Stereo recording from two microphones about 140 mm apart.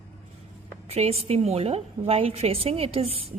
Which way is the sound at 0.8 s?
45° right (ahead or behind).